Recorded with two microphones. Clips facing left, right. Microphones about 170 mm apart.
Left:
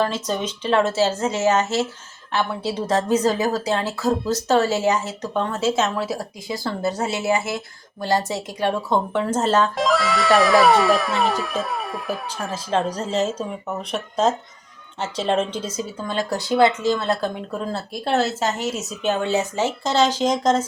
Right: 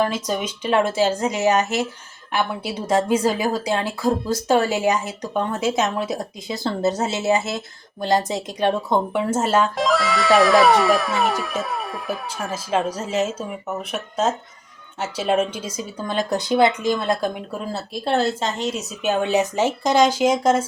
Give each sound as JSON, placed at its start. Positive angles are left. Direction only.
{"t": 0.0, "sound": "speech", "side_deg": -10}
{"t": 17.7, "sound": "speech", "side_deg": 0}
{"t": 19.0, "sound": "speech", "side_deg": -15}